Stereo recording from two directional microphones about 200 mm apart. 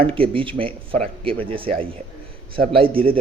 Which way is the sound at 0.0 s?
25° right (ahead or behind).